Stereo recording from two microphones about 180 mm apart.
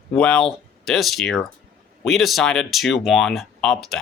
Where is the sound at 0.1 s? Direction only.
5° left (ahead or behind).